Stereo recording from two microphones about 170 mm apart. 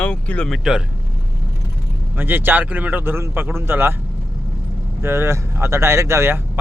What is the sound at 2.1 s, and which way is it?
A man's voice, 10° right (ahead or behind).